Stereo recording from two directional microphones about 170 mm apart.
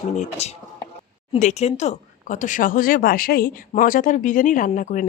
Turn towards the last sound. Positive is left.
turn(degrees=50)  # may be behind; listen again after turning